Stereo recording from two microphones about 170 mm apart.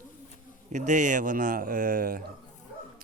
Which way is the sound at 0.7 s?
45° right (ahead or behind).